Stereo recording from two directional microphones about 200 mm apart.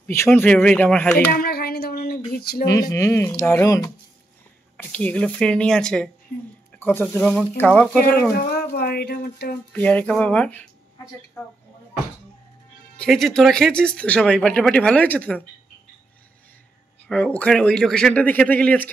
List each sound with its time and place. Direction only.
0.0 s speech: 10° left (ahead or behind)
1.3 s speech: 50° left (ahead or behind)
2.6 s speech: 15° left (ahead or behind)
4.9 s speech: 5° left (ahead or behind)
8.4 s speech: 50° left (ahead or behind)
9.7 s speech: 5° left (ahead or behind)
12.9 s speech: centre (ahead or behind)
17.1 s speech: 5° left (ahead or behind)